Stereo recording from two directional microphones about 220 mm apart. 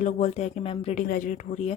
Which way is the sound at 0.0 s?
30° left (ahead or behind).